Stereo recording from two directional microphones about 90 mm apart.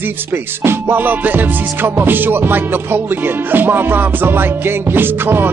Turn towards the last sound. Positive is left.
turn(degrees=-25)  # may be behind; listen again after turning